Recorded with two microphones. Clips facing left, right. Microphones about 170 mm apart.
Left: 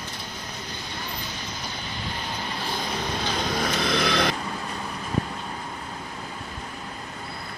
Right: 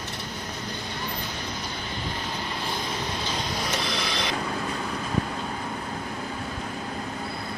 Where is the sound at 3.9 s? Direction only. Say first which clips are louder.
Left 7 dB; 55° left (ahead or behind).